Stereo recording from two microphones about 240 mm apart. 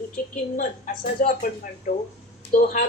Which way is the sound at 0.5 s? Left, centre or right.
Left.